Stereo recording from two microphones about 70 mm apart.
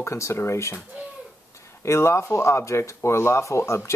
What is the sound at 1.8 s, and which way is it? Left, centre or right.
Speech, left.